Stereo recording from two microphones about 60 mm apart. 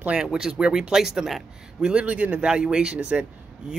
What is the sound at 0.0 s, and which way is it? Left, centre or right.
Speech, centre.